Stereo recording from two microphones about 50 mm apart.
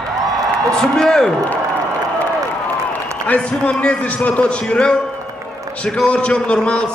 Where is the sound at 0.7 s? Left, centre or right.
Centre.